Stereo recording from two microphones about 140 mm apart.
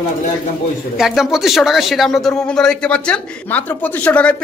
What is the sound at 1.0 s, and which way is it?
Speech, centre (ahead or behind).